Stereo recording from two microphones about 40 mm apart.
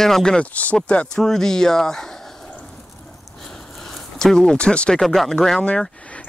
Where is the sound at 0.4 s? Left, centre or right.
Left.